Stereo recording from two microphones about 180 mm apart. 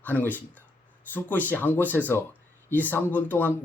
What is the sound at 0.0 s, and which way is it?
Speech, 10° left (ahead or behind).